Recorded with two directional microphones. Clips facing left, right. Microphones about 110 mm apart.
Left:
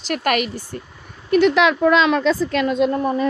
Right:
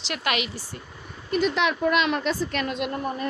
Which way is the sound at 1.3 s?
85° left.